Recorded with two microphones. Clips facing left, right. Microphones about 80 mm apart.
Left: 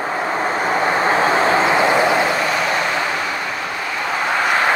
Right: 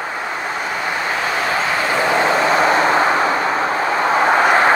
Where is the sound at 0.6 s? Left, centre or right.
Left.